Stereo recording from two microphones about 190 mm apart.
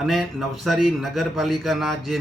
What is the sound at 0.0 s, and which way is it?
A man's voice, centre (ahead or behind).